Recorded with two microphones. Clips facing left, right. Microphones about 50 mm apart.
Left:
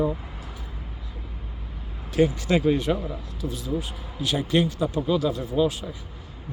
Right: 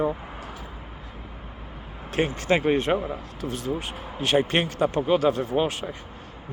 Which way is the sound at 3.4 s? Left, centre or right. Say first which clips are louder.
Even; right.